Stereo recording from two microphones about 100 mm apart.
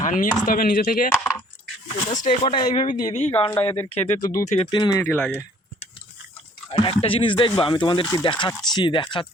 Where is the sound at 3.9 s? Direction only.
90° left.